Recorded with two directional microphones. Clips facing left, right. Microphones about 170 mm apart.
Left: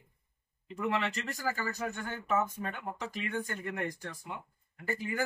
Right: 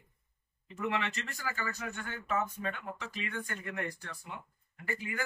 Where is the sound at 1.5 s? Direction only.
40° left (ahead or behind).